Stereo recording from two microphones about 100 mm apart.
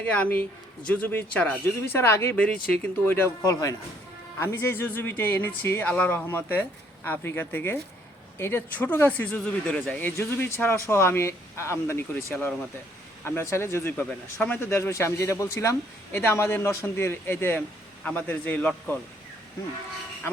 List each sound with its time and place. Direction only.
0.0 s a man's voice: 15° left (ahead or behind)
1.9 s speech: 25° left (ahead or behind)
2.4 s a man's voice: 10° left (ahead or behind)
3.4 s a man's voice: 35° left (ahead or behind)
4.4 s speech: 25° left (ahead or behind)
9.7 s speech: 5° left (ahead or behind)
10.0 s a man's voice: 20° left (ahead or behind)